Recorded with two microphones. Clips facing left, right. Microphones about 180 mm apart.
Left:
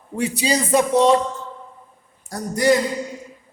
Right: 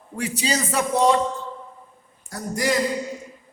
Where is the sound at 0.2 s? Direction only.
15° left (ahead or behind).